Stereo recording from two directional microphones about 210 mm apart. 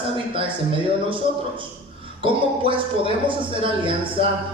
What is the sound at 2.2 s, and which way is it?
A man's voice, 25° right (ahead or behind).